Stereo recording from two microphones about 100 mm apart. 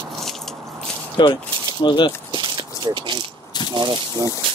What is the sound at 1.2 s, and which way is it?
Speech, 50° left (ahead or behind).